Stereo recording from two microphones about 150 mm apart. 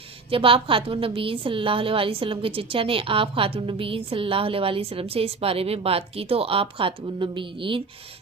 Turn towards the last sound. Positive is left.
turn(degrees=-35)  # may be behind; listen again after turning